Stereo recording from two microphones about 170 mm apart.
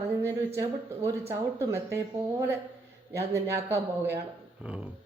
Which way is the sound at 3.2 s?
15° right (ahead or behind).